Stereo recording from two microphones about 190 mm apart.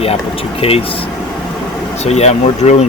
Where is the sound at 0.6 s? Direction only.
30° left (ahead or behind).